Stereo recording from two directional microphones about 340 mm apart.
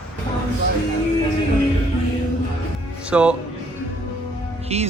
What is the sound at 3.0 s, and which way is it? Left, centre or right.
Speech, centre.